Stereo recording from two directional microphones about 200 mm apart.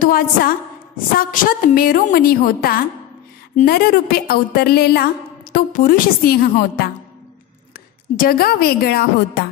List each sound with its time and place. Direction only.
0.0 s a woman's voice: 45° left (ahead or behind)
8.2 s a woman's voice: 45° left (ahead or behind)